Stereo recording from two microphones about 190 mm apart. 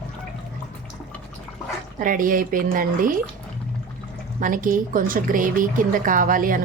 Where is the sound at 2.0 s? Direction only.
45° right (ahead or behind).